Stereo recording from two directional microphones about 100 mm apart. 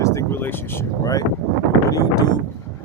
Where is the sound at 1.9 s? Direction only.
40° left (ahead or behind).